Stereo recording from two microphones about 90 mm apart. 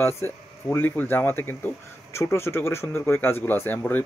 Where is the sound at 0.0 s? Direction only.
25° left (ahead or behind).